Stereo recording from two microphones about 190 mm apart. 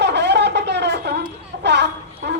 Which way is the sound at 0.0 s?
65° right (ahead or behind).